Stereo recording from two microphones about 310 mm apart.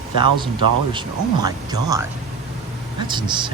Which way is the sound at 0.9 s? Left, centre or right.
Centre.